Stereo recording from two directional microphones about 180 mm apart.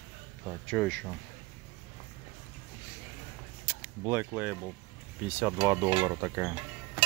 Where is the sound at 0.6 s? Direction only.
5° left (ahead or behind).